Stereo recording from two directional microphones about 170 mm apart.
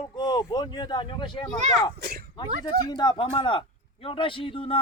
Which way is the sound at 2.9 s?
25° left (ahead or behind).